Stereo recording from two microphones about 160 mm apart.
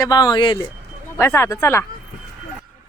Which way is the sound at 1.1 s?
15° left (ahead or behind).